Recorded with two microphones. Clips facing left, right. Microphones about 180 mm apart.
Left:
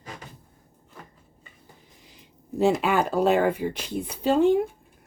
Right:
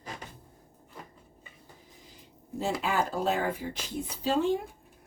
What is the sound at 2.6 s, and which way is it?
Speech, 70° left (ahead or behind).